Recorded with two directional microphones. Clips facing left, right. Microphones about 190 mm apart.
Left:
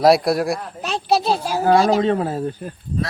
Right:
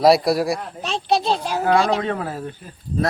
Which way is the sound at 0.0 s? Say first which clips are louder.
Even; centre (ahead or behind).